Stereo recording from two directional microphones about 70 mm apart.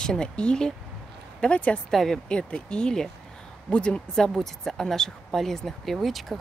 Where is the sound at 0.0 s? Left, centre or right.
Centre.